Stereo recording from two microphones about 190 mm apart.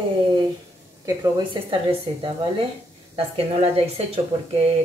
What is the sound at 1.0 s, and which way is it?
A woman's voice, 20° right (ahead or behind).